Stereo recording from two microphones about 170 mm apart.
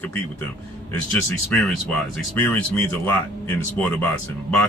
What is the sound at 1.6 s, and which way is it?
Speech, 5° left (ahead or behind).